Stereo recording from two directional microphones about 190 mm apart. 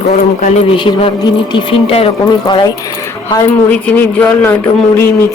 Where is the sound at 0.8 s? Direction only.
25° left (ahead or behind).